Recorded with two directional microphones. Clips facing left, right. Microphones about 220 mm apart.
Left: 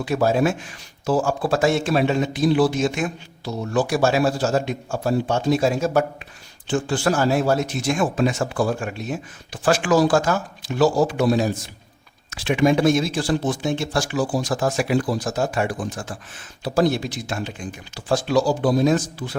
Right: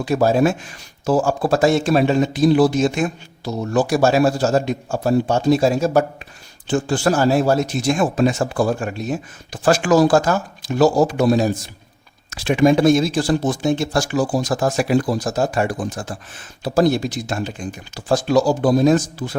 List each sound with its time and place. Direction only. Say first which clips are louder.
0.0 s a man's voice: right 3 dB; 40° right (ahead or behind)